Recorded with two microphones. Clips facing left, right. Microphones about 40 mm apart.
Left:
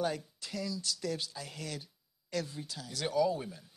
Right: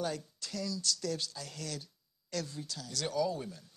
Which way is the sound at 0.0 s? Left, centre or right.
Centre.